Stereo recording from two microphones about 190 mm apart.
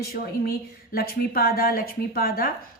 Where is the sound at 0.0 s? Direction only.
55° left (ahead or behind).